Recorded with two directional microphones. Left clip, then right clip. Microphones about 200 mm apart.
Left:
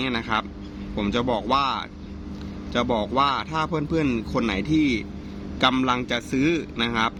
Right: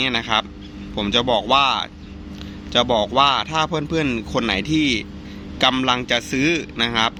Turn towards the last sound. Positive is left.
turn(degrees=0)  # may be behind; listen again after turning